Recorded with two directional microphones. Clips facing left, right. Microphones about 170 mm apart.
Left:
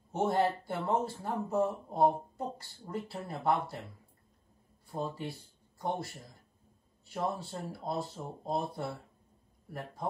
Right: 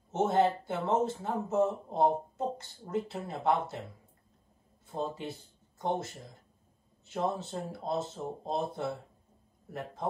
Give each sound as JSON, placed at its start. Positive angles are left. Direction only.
{"t": 0.3, "sound": "speech", "side_deg": -20}
{"t": 4.8, "sound": "speech", "side_deg": -20}